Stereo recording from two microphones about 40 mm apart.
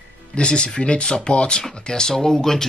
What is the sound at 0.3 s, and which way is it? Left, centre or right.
Speech, left.